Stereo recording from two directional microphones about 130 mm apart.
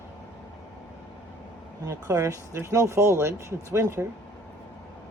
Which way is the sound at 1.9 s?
25° right (ahead or behind).